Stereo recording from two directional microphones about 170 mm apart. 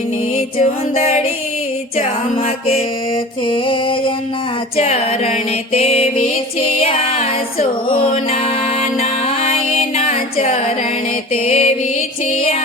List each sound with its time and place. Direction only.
0.6 s music: 40° left (ahead or behind)
2.3 s music: 40° left (ahead or behind)
3.4 s music: 30° left (ahead or behind)